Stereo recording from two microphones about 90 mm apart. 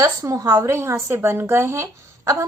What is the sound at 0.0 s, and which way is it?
A woman's voice, 40° right (ahead or behind).